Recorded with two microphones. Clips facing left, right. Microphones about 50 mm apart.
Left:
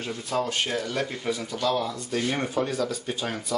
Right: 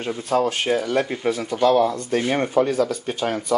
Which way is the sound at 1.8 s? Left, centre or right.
Right.